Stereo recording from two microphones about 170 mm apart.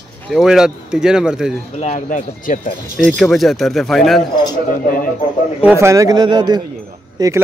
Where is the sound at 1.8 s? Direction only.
45° left (ahead or behind).